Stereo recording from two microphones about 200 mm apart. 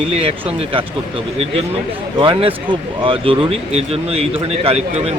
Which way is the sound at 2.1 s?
25° right (ahead or behind).